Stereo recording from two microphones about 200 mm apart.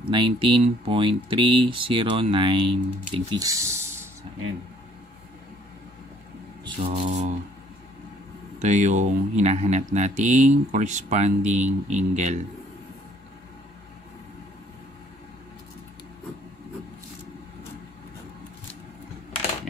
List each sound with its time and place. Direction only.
0.0 s speech: 25° right (ahead or behind)
6.9 s speech: 35° right (ahead or behind)
8.5 s speech: 35° right (ahead or behind)